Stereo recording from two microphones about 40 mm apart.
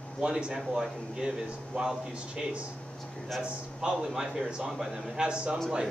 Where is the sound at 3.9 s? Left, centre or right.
Centre.